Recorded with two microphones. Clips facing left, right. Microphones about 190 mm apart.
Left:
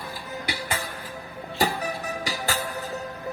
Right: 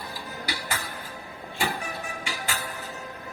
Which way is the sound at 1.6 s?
40° left (ahead or behind).